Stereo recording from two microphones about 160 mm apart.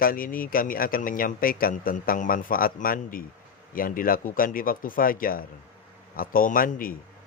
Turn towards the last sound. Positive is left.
turn(degrees=60)  # may be behind; listen again after turning